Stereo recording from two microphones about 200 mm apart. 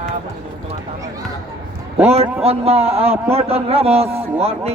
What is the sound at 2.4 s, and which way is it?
A man's voice, 30° right (ahead or behind).